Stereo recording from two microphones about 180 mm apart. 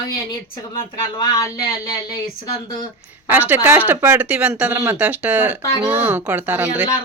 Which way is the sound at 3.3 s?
10° right (ahead or behind).